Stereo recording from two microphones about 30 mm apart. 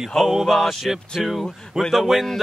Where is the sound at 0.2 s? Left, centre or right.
Centre.